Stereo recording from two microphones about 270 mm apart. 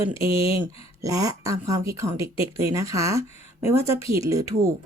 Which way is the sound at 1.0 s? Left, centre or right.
Centre.